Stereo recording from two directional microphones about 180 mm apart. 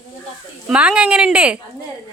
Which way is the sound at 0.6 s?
5° right (ahead or behind).